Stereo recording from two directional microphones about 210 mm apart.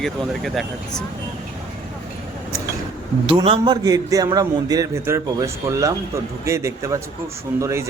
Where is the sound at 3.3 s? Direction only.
25° right (ahead or behind).